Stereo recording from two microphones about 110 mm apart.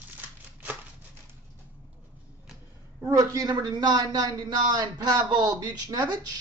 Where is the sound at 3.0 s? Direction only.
30° right (ahead or behind).